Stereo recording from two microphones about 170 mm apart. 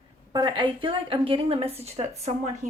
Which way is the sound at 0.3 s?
30° right (ahead or behind).